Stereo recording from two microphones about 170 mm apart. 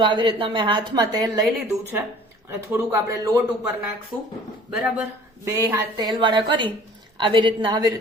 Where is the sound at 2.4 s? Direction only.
15° right (ahead or behind).